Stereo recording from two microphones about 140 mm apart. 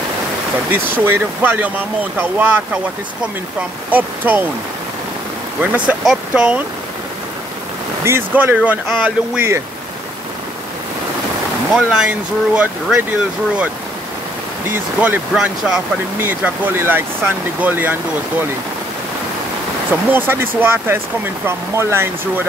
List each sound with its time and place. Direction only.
0.7 s speech: 15° right (ahead or behind)
3.9 s speech: 10° right (ahead or behind)
5.9 s speech: 5° right (ahead or behind)
8.0 s speech: 15° right (ahead or behind)
11.7 s speech: 5° right (ahead or behind)
15.0 s speech: 10° right (ahead or behind)
19.9 s speech: 15° right (ahead or behind)